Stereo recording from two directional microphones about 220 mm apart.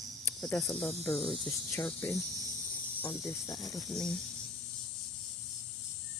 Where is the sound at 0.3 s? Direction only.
10° left (ahead or behind).